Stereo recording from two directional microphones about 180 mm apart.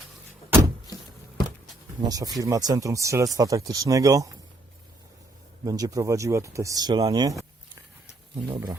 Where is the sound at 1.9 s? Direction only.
20° right (ahead or behind).